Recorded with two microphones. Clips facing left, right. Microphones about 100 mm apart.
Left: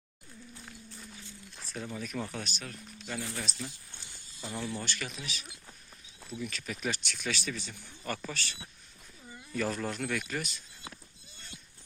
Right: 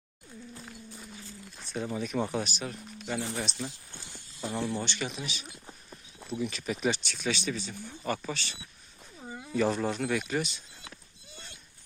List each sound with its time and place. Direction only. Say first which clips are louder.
1.7 s speech: right 6 dB; 20° right (ahead or behind)
6.7 s speech: right 6 dB; 20° right (ahead or behind)
9.2 s a sound: right 8 dB; 85° right
9.6 s speech: right 5 dB; 20° right (ahead or behind)